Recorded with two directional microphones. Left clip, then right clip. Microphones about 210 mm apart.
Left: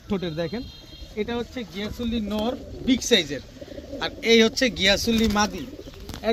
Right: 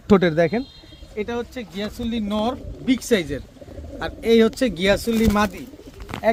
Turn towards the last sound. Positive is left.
turn(degrees=-55)  # may be behind; listen again after turning